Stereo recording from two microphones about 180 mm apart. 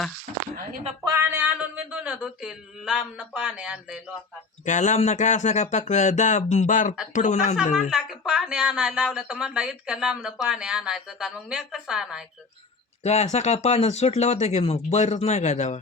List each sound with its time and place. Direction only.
1.0 s a sound: 15° right (ahead or behind)
4.6 s speech: 40° left (ahead or behind)
7.9 s speech: 5° right (ahead or behind)
13.0 s speech: 40° left (ahead or behind)